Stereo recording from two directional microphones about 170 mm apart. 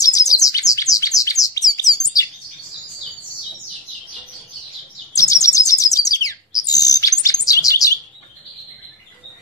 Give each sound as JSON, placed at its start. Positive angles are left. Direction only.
{"t": 0.0, "sound": "bird", "side_deg": 20}
{"t": 5.1, "sound": "bird", "side_deg": 20}